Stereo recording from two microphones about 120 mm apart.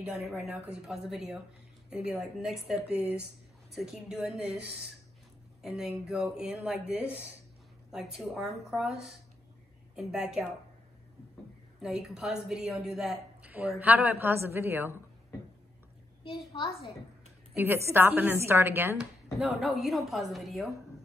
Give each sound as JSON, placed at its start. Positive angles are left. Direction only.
{"t": 0.5, "sound": "a woman's voice", "side_deg": -5}
{"t": 11.8, "sound": "speech", "side_deg": -5}
{"t": 13.4, "sound": "a woman's voice", "side_deg": -15}
{"t": 16.3, "sound": "a child's voice", "side_deg": 45}
{"t": 17.6, "sound": "a woman's voice", "side_deg": -20}
{"t": 19.3, "sound": "speech", "side_deg": 0}